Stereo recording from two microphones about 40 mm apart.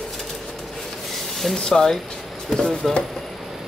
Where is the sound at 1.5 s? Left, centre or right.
Centre.